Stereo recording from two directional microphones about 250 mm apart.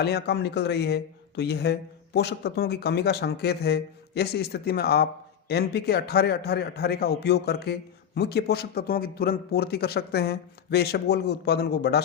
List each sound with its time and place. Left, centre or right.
0.0 s a man's voice: left